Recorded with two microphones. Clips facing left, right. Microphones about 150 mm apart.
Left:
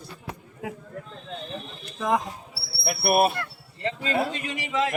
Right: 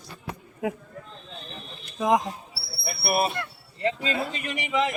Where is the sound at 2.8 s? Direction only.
60° left (ahead or behind).